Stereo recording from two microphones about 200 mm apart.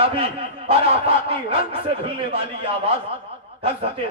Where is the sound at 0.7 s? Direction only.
30° right (ahead or behind).